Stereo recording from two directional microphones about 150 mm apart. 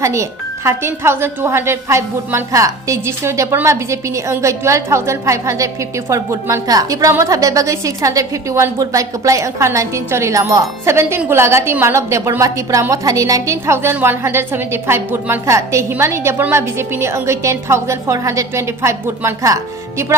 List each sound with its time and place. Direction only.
0.0 s a woman's voice: 20° right (ahead or behind)